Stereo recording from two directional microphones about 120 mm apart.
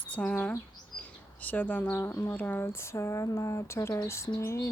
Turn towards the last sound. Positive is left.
turn(degrees=25)  # may be behind; listen again after turning